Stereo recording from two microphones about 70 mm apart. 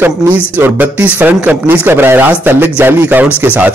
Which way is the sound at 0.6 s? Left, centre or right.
Right.